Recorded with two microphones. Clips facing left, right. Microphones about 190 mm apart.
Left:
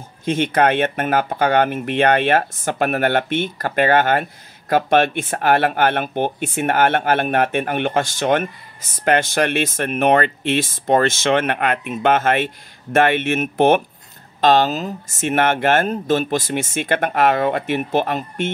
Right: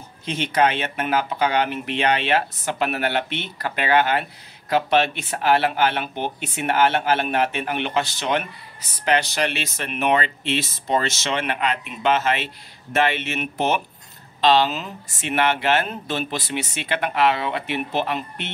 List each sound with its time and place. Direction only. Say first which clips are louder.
0.2 s speech: left 4 dB; 50° left (ahead or behind)